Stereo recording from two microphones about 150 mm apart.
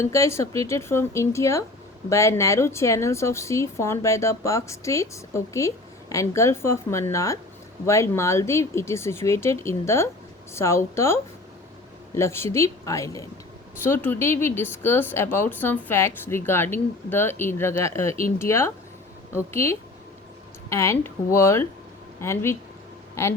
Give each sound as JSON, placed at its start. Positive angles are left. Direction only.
{"t": 0.0, "sound": "a woman's voice", "side_deg": 20}